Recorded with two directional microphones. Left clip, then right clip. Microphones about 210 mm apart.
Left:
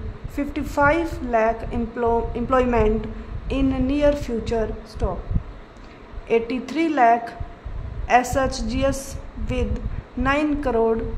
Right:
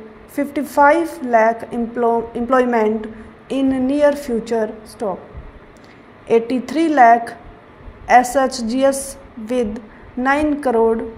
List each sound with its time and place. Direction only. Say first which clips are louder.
0.4 s a woman's voice: right 7 dB; 15° right (ahead or behind)
6.2 s a woman's voice: right 5 dB; 20° right (ahead or behind)